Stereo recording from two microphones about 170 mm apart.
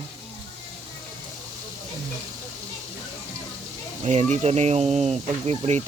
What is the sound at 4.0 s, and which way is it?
Speech, 40° right (ahead or behind).